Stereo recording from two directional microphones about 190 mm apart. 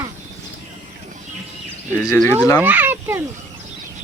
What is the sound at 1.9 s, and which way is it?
Speech, 20° left (ahead or behind).